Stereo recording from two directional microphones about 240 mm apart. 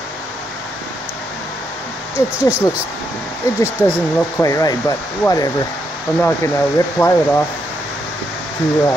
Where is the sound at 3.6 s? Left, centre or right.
Centre.